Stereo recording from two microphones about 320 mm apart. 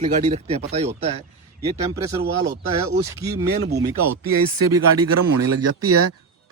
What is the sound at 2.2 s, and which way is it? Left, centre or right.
Speech, right.